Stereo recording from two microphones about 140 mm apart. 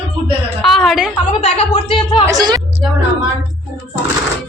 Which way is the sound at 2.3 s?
25° right (ahead or behind).